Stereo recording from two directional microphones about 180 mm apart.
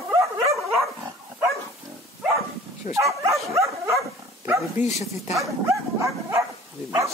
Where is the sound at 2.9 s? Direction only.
15° right (ahead or behind).